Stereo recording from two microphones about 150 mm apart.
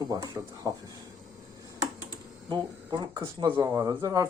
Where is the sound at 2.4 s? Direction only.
30° right (ahead or behind).